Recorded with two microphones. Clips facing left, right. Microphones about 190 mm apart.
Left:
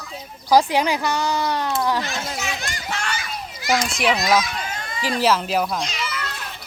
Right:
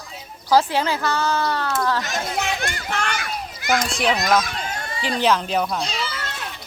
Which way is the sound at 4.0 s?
5° left (ahead or behind).